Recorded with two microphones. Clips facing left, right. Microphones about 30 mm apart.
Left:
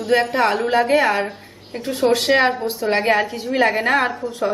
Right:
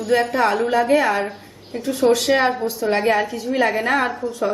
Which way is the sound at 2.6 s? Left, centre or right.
Left.